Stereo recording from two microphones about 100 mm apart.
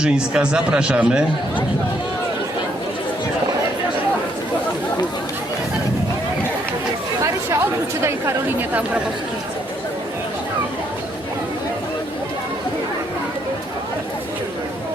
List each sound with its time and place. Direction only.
0.0 s speech: 10° right (ahead or behind)
7.2 s chatter: 30° right (ahead or behind)